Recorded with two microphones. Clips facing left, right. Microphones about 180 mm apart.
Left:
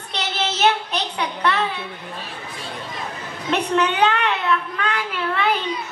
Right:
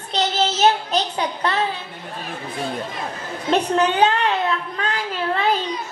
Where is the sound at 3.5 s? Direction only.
30° right (ahead or behind).